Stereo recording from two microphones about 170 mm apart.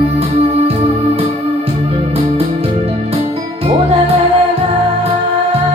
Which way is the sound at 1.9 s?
35° right (ahead or behind).